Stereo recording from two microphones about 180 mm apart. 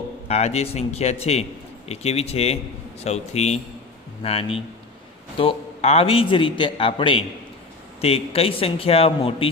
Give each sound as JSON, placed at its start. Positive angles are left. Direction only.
{"t": 0.3, "sound": "a man's voice", "side_deg": 35}